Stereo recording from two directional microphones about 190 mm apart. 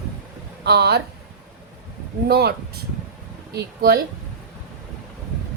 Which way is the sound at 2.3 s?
55° right (ahead or behind).